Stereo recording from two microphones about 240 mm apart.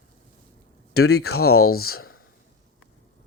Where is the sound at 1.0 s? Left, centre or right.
Left.